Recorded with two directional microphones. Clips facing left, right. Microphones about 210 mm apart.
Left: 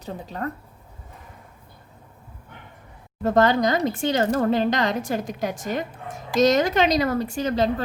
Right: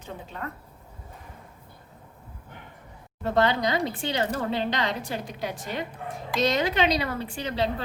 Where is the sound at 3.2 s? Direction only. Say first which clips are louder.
Left 5 dB; 45° left (ahead or behind).